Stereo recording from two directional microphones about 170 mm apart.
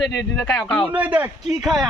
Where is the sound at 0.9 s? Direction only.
10° right (ahead or behind).